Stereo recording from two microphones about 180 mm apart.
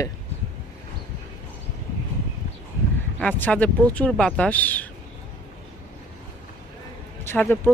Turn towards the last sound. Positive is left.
turn(degrees=10)  # may be behind; listen again after turning